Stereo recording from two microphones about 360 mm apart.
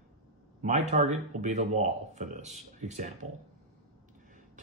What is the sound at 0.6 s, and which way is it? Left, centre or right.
Speech, centre.